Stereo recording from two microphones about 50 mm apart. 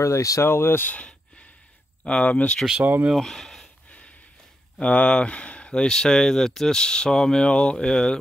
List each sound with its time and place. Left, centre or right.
0.0 s speech: left
2.0 s speech: left
2.8 s speech: right
3.2 s speech: centre
4.7 s speech: left